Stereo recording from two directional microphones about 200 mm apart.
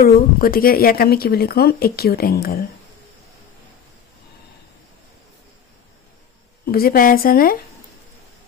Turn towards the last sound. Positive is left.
turn(degrees=45)  # may be behind; listen again after turning